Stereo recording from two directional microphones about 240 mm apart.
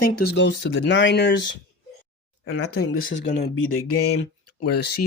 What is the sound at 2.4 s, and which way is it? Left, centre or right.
Speech, left.